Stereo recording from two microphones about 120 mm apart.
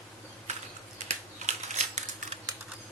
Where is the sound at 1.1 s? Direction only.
75° right (ahead or behind).